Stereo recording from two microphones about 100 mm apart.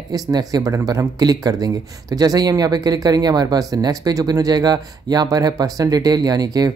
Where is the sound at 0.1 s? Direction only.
40° right (ahead or behind).